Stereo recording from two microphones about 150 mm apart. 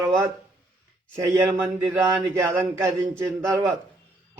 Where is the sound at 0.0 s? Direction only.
15° right (ahead or behind).